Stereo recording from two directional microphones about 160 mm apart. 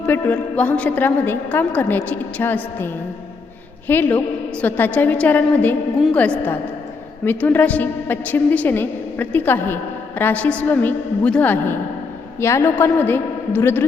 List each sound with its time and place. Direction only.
0.0 s a woman's voice: 10° left (ahead or behind)